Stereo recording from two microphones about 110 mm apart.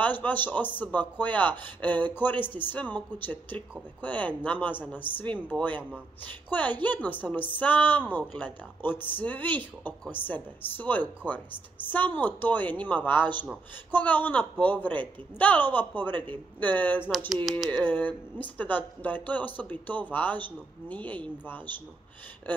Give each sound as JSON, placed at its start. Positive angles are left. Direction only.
{"t": 0.0, "sound": "speech", "side_deg": 15}